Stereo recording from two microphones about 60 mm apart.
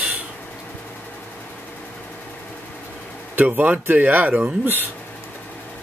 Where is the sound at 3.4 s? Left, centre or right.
Right.